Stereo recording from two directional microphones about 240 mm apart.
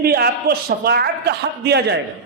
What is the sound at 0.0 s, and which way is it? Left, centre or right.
A man's voice, right.